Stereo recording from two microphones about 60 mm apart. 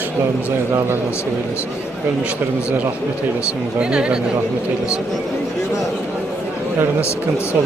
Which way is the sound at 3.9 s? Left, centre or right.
Centre.